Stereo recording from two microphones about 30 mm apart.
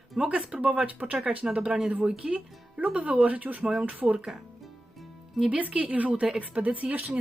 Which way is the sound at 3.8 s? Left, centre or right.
Right.